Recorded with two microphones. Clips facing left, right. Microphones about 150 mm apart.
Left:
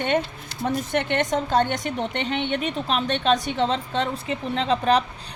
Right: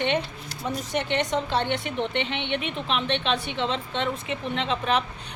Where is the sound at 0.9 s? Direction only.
55° left (ahead or behind).